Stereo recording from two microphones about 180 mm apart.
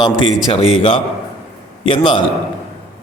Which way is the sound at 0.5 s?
30° left (ahead or behind).